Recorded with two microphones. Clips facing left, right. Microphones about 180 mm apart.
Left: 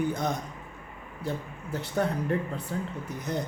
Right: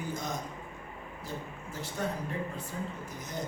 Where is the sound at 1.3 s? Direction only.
60° left (ahead or behind).